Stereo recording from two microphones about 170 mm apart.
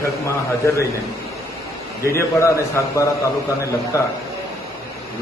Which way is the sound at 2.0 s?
15° left (ahead or behind).